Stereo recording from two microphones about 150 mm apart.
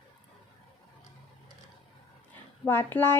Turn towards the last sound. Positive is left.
turn(degrees=15)  # may be behind; listen again after turning